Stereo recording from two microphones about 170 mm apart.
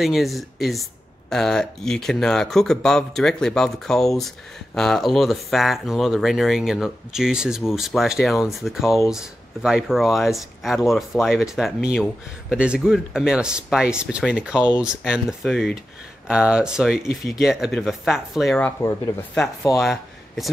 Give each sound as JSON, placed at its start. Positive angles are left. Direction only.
{"t": 0.0, "sound": "speech", "side_deg": 0}
{"t": 19.8, "sound": "speech", "side_deg": 0}